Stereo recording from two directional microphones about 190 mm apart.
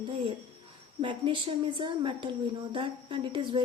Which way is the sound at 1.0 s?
25° right (ahead or behind).